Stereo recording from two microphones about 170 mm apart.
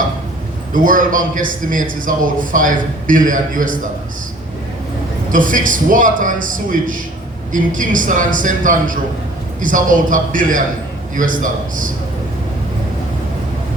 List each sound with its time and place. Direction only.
0.7 s a man's voice: 50° right (ahead or behind)
5.3 s a man's voice: 50° right (ahead or behind)